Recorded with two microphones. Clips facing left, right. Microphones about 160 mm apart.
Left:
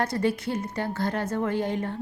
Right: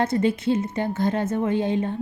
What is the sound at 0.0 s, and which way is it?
A woman's voice, 20° right (ahead or behind).